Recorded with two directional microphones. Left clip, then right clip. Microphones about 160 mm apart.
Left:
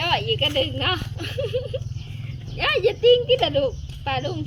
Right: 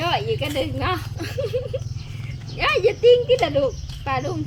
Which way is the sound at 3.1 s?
15° right (ahead or behind).